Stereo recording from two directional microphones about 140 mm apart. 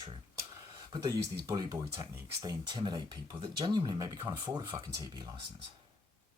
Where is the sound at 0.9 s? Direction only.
25° right (ahead or behind).